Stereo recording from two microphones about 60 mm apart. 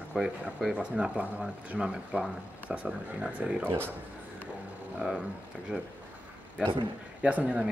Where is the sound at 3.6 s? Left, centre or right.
Right.